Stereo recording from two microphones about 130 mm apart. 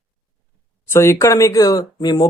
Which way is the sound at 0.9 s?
20° left (ahead or behind).